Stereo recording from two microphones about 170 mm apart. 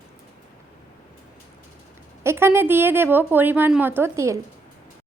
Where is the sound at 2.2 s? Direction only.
15° right (ahead or behind).